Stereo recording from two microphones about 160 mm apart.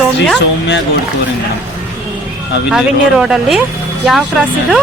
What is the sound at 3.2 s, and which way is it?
Speech, 5° right (ahead or behind).